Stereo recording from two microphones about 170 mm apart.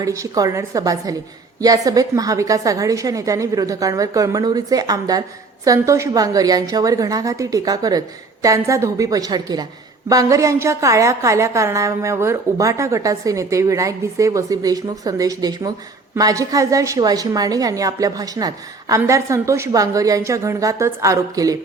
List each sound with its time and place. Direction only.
0.0 s a woman's voice: 20° right (ahead or behind)